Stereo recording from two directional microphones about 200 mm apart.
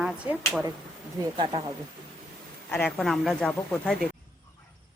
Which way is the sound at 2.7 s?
10° left (ahead or behind).